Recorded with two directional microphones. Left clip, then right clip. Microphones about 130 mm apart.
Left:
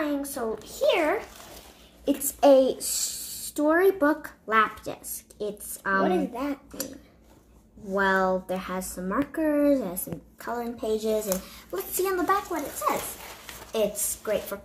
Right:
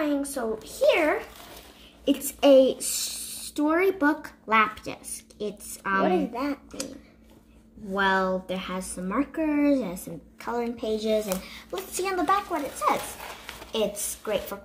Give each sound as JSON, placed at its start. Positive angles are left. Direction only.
{"t": 0.0, "sound": "a woman's voice", "side_deg": -15}
{"t": 2.0, "sound": "a child's voice", "side_deg": -30}
{"t": 3.7, "sound": "speech", "side_deg": -45}
{"t": 5.4, "sound": "speech", "side_deg": -35}
{"t": 6.0, "sound": "a woman's voice", "side_deg": 25}
{"t": 7.9, "sound": "a child's voice", "side_deg": -25}
{"t": 13.7, "sound": "speech", "side_deg": -40}